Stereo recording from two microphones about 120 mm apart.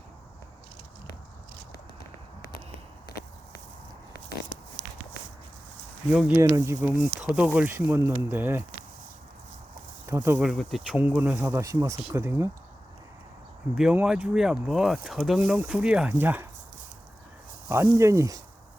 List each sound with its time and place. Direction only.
6.1 s speech: 10° right (ahead or behind)
6.4 s speech: 25° right (ahead or behind)
7.2 s speech: 10° right (ahead or behind)
10.1 s speech: 20° right (ahead or behind)
10.4 s speech: centre (ahead or behind)
11.0 s speech: 15° right (ahead or behind)
13.7 s speech: 5° right (ahead or behind)
17.7 s speech: 25° right (ahead or behind)